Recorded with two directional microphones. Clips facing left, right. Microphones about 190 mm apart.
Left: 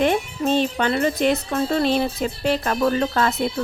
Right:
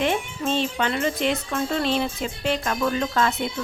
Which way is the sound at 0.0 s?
45° left (ahead or behind).